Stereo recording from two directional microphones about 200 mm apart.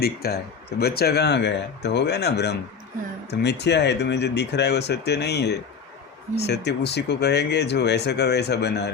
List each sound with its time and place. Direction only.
0.0 s speech: 50° left (ahead or behind)